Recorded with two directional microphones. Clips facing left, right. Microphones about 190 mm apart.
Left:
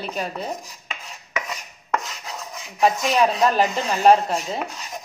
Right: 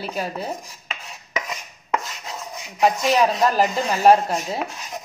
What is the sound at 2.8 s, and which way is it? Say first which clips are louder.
Speech: right 1 dB; centre (ahead or behind).